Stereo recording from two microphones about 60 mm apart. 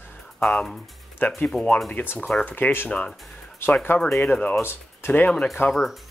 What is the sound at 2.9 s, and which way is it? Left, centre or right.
Speech, centre.